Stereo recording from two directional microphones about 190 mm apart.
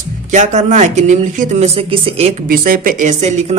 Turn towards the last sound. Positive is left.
turn(degrees=-35)  # may be behind; listen again after turning